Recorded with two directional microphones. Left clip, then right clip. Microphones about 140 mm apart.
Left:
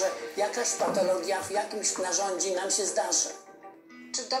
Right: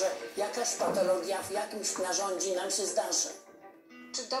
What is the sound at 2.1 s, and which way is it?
Speech, 5° right (ahead or behind).